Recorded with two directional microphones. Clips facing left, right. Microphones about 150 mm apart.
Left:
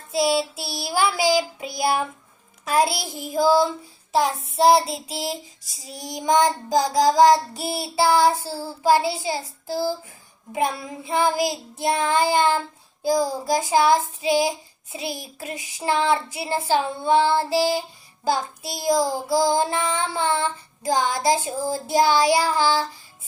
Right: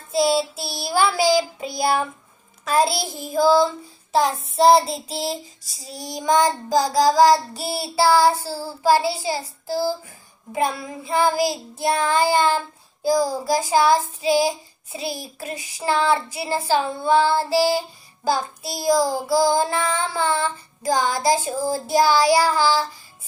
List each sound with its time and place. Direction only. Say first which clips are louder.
0.1 s child singing: right 2 dB; 10° left (ahead or behind)